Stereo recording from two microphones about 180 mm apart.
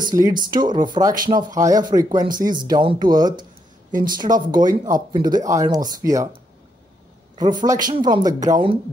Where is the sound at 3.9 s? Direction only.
50° right (ahead or behind).